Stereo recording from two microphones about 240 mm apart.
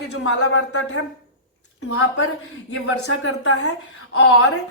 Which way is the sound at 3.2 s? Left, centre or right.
Left.